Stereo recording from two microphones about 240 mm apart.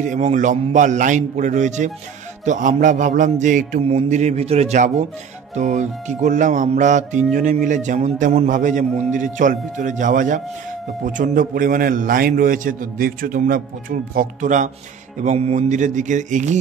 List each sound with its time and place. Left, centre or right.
0.0 s a man's voice: right